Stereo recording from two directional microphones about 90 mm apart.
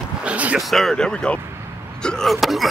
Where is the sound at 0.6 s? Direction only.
Centre (ahead or behind).